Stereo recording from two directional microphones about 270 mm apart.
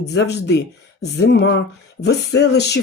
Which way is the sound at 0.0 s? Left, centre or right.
Left.